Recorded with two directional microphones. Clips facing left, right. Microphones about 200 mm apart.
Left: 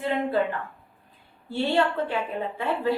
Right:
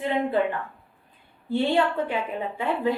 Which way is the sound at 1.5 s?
15° right (ahead or behind).